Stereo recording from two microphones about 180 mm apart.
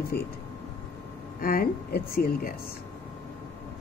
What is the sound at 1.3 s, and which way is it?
A woman's voice, 55° left (ahead or behind).